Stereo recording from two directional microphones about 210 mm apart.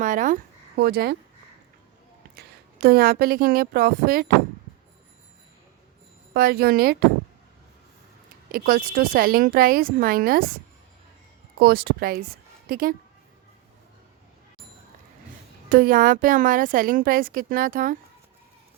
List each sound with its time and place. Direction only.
0.0 s speech: 40° right (ahead or behind)
2.8 s speech: 45° right (ahead or behind)
6.3 s speech: 45° right (ahead or behind)
8.5 s speech: 45° right (ahead or behind)
11.6 s a woman's voice: 45° right (ahead or behind)
15.7 s a woman's voice: 45° right (ahead or behind)